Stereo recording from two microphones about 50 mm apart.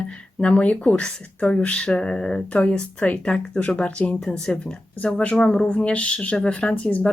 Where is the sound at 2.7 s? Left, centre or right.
Left.